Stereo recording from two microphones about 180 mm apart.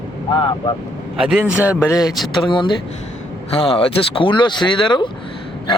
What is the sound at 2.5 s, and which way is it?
Speech, 25° left (ahead or behind).